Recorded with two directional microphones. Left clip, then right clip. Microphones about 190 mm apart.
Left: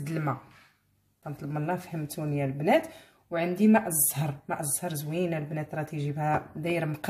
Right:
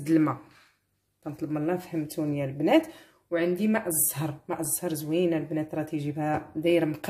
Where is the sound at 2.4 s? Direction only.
35° right (ahead or behind).